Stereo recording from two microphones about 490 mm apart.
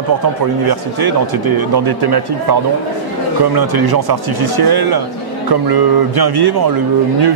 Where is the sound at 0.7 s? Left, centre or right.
Right.